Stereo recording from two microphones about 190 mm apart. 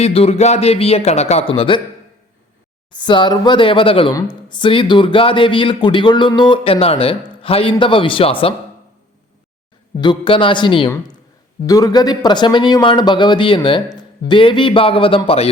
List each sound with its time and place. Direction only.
0.0 s a man's voice: 35° left (ahead or behind)
2.9 s speech: 25° left (ahead or behind)
10.0 s speech: 25° left (ahead or behind)